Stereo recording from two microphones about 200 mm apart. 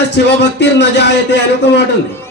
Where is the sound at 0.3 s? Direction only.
60° left (ahead or behind).